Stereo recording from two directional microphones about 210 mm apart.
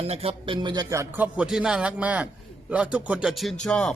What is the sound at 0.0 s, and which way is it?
A man's voice, 30° right (ahead or behind).